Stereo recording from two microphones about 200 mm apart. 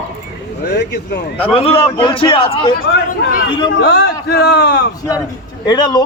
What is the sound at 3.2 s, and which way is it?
A man's voice, 55° left (ahead or behind).